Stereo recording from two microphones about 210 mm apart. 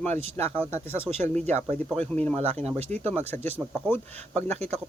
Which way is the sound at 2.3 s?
30° right (ahead or behind).